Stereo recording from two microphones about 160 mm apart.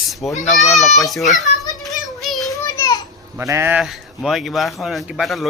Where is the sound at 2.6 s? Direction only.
20° left (ahead or behind).